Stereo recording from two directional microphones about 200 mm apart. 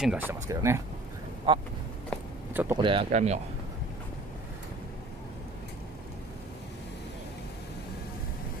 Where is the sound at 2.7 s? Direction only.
25° right (ahead or behind).